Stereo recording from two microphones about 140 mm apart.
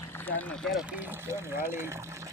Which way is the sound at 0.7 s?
15° right (ahead or behind).